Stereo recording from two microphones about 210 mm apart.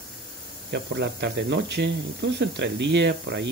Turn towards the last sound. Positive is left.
turn(degrees=-55)  # may be behind; listen again after turning